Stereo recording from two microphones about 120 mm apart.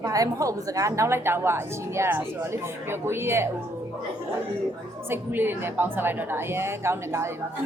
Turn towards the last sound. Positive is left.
turn(degrees=-20)  # may be behind; listen again after turning